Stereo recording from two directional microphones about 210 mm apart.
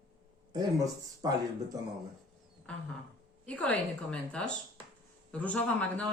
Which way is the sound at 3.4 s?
5° left (ahead or behind).